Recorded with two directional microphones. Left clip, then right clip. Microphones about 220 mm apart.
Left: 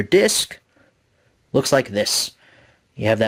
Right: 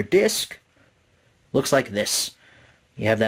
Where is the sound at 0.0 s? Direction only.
35° left (ahead or behind).